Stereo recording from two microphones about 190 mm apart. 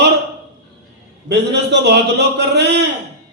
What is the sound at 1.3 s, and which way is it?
Speech, 65° right (ahead or behind).